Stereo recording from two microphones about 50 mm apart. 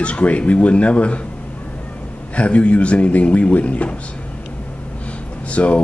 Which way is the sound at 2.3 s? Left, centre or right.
Left.